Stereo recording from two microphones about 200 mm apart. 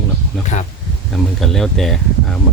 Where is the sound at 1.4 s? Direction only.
Centre (ahead or behind).